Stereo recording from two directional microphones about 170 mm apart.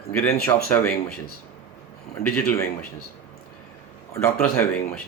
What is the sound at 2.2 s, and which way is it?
Speech, 15° left (ahead or behind).